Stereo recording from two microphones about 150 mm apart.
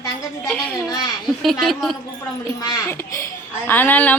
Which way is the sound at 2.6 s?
20° left (ahead or behind).